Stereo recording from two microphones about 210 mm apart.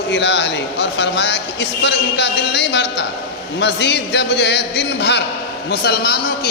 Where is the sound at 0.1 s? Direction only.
55° left (ahead or behind).